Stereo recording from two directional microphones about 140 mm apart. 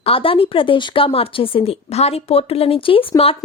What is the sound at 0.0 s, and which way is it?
Speech, 40° left (ahead or behind).